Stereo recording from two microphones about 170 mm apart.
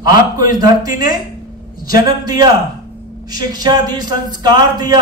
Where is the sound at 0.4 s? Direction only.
20° right (ahead or behind).